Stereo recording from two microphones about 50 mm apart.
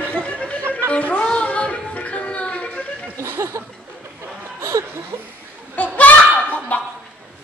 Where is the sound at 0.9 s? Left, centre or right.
Left.